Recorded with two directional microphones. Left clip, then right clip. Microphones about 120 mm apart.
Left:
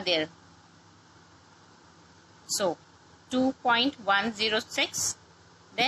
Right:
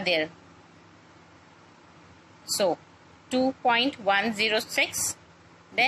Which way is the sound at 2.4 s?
30° right (ahead or behind).